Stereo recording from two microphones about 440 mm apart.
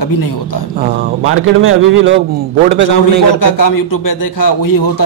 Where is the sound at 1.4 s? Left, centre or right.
Right.